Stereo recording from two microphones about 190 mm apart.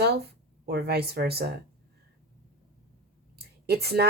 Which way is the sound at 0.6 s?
55° right (ahead or behind).